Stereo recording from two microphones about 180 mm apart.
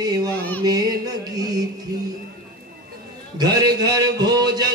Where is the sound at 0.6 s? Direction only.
20° right (ahead or behind).